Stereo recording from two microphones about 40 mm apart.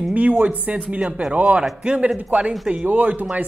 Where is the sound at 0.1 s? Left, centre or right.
Right.